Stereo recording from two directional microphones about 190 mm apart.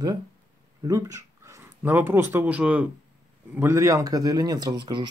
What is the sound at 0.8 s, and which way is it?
Speech, 15° right (ahead or behind).